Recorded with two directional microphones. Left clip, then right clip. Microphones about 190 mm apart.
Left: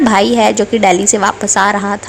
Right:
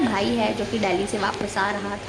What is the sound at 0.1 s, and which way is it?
A woman's voice, 40° left (ahead or behind).